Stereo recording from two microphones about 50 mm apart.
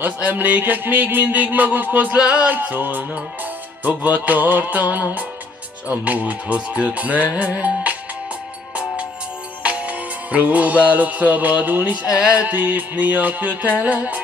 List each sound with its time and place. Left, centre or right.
0.0 s music: right
2.5 s music: right
9.6 s music: right
12.2 s music: right
12.4 s music: right